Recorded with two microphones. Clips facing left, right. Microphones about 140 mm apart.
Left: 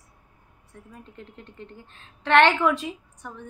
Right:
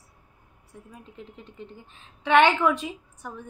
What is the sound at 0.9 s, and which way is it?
A woman's voice, 5° right (ahead or behind).